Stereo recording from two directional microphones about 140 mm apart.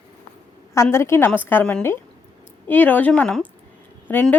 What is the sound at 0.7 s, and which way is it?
A woman's voice, 20° left (ahead or behind).